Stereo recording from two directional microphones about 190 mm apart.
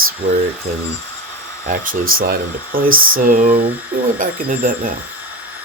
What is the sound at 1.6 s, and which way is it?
Speech, 50° right (ahead or behind).